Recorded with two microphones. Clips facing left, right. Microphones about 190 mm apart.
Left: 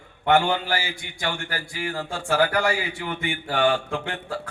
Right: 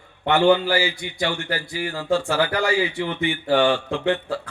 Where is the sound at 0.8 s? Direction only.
50° left (ahead or behind).